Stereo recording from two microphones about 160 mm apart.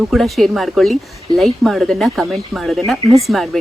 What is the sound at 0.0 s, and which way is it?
A woman's voice, centre (ahead or behind).